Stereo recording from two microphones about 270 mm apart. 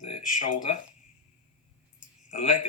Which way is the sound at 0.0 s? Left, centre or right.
Left.